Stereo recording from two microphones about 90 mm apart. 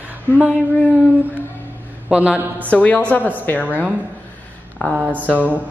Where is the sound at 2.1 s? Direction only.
15° right (ahead or behind).